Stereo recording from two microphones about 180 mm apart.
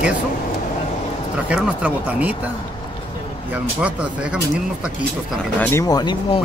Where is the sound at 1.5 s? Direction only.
5° right (ahead or behind).